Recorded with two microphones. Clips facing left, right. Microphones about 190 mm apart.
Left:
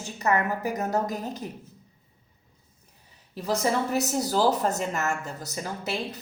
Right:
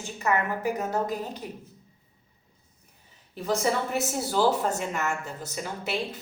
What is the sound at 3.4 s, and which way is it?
A woman's voice, 40° left (ahead or behind).